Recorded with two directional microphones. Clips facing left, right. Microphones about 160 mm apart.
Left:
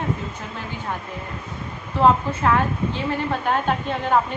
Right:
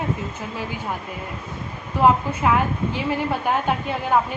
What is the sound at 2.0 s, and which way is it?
A woman's voice, 10° right (ahead or behind).